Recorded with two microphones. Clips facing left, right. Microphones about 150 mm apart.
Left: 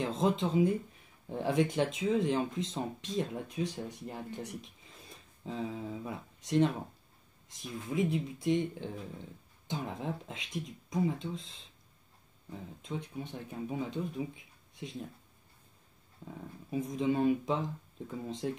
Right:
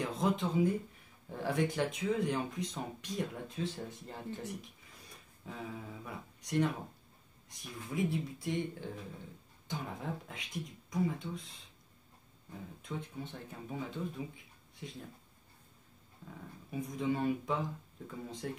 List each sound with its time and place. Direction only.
0.0 s speech: 20° left (ahead or behind)
12.8 s speech: 20° left (ahead or behind)
16.7 s speech: 20° left (ahead or behind)